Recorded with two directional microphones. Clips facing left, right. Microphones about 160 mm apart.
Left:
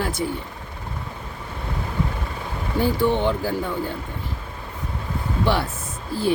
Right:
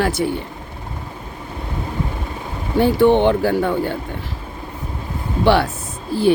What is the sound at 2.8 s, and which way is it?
A woman's voice, 65° right (ahead or behind).